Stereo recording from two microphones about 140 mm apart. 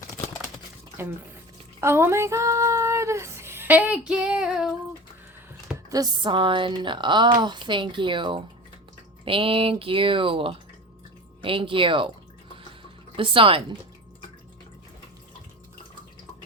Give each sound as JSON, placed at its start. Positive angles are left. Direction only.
{"t": 1.8, "sound": "female singing", "side_deg": -15}
{"t": 5.9, "sound": "speech", "side_deg": -30}
{"t": 13.1, "sound": "speech", "side_deg": -40}